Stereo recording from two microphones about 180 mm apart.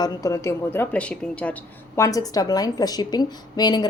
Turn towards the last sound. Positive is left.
turn(degrees=25)  # may be behind; listen again after turning